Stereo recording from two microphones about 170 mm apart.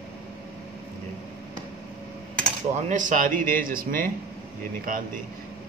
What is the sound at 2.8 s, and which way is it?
A man's voice, 45° right (ahead or behind).